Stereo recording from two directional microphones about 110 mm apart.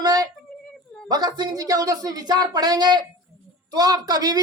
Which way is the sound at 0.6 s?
5° left (ahead or behind).